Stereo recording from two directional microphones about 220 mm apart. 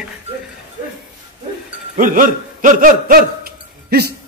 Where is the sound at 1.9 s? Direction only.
35° right (ahead or behind).